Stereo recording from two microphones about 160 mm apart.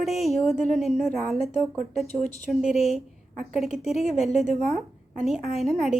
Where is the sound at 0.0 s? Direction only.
Centre (ahead or behind).